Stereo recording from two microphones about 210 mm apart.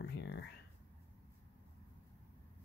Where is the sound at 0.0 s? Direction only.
55° left (ahead or behind).